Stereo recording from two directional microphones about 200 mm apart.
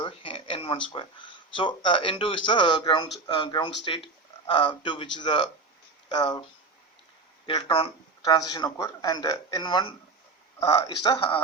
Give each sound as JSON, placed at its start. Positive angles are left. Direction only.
{"t": 0.0, "sound": "a sound", "side_deg": 30}
{"t": 1.5, "sound": "speech", "side_deg": 25}
{"t": 7.4, "sound": "speech", "side_deg": 25}